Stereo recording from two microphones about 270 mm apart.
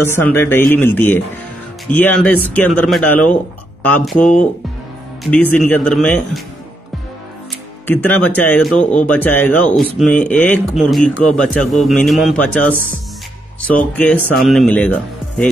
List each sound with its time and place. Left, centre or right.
0.0 s speech: centre
7.8 s speech: centre
13.9 s speech: centre